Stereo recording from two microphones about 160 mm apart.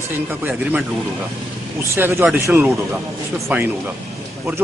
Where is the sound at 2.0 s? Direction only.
15° right (ahead or behind).